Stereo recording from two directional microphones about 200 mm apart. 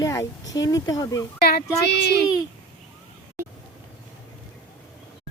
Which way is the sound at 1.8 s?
55° left (ahead or behind).